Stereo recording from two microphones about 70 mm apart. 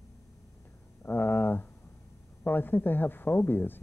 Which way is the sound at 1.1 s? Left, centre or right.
Left.